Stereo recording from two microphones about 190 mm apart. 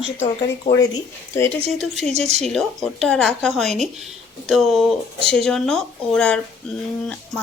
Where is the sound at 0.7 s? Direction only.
15° left (ahead or behind).